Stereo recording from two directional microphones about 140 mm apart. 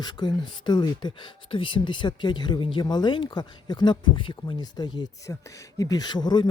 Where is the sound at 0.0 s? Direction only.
30° left (ahead or behind).